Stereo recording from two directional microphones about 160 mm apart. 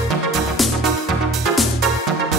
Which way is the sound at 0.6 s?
Centre (ahead or behind).